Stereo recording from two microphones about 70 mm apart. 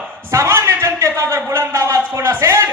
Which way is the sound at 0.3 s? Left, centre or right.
Right.